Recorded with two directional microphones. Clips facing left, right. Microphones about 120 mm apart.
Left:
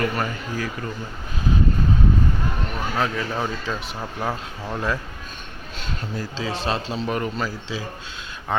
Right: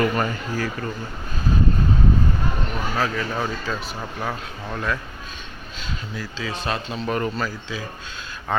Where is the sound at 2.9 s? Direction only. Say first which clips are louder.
Even; 20° left (ahead or behind).